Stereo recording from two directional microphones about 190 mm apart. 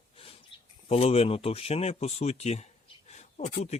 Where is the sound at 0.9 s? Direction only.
30° left (ahead or behind).